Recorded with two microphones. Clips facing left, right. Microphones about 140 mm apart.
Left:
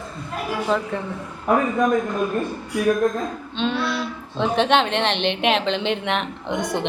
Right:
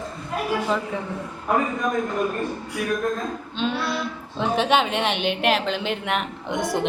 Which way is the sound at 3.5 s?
5° right (ahead or behind).